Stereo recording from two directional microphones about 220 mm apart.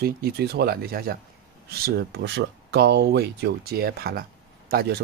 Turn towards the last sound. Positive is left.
turn(degrees=-45)  # may be behind; listen again after turning